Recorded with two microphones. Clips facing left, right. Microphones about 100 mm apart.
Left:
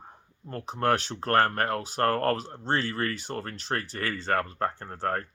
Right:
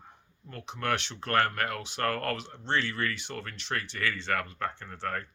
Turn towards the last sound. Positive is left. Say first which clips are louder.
# left 5 dB
turn(degrees=40)  # may be behind; listen again after turning